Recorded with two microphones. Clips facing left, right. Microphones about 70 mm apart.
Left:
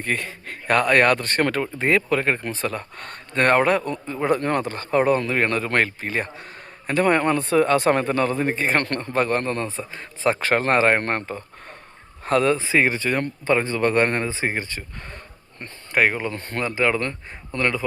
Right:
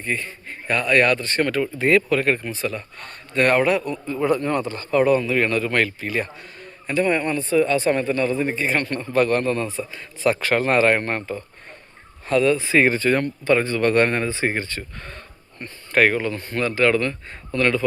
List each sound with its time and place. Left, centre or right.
0.0 s speech: left
1.8 s speech: left
2.4 s a man's voice: left
4.4 s a man's voice: left
6.8 s speech: left
8.8 s a man's voice: left
9.1 s a man's voice: left
12.5 s speech: centre
12.8 s speech: centre
13.4 s speech: left
15.9 s speech: centre
17.0 s speech: left
17.6 s speech: centre